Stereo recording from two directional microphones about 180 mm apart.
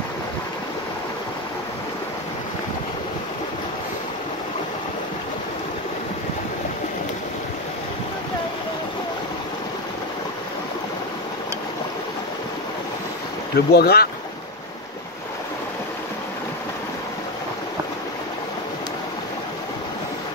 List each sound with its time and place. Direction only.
13.6 s speech: 60° left (ahead or behind)